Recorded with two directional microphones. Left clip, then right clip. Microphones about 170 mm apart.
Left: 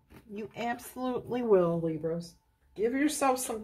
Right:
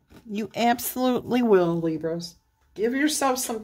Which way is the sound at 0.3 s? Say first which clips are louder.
Right 12 dB; 55° right (ahead or behind).